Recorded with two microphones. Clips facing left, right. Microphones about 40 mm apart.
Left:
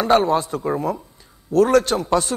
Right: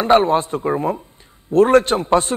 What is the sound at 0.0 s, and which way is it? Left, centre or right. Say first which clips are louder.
A man's voice: right 3 dB; right.